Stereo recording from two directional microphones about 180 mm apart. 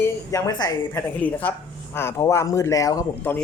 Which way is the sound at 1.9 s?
15° left (ahead or behind).